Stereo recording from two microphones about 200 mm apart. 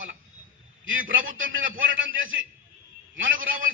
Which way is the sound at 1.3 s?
75° right (ahead or behind).